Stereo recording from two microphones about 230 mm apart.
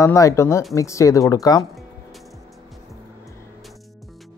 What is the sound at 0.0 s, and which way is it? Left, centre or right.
Speech, centre.